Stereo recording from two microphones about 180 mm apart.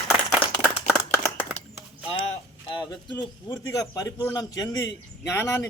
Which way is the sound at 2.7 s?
25° left (ahead or behind).